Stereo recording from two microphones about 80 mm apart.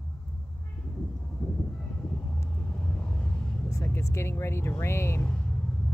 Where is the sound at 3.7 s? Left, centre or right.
Left.